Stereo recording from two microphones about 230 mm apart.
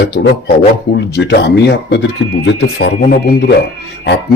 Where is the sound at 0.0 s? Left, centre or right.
Left.